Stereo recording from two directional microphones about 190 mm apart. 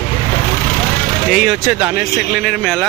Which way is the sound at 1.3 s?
Centre (ahead or behind).